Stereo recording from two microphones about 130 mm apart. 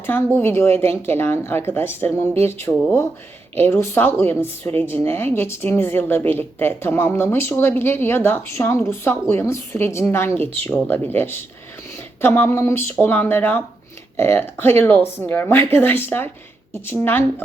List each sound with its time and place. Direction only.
0.0 s a woman's voice: 15° left (ahead or behind)